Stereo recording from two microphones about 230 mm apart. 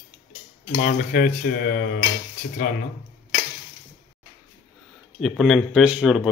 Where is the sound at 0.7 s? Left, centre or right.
Left.